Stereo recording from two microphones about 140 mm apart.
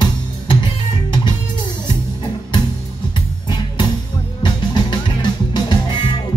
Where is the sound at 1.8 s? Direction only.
35° left (ahead or behind).